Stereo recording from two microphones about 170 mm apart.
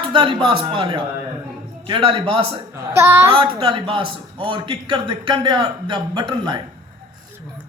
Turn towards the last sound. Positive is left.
turn(degrees=-25)  # may be behind; listen again after turning